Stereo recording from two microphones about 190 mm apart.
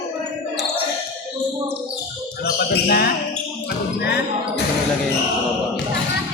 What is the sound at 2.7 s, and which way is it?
Speech, 55° left (ahead or behind).